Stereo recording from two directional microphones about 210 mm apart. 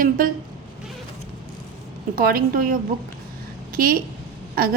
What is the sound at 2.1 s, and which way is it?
Speech, 45° right (ahead or behind).